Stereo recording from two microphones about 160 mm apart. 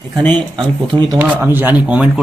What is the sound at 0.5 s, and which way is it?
Speech, 30° right (ahead or behind).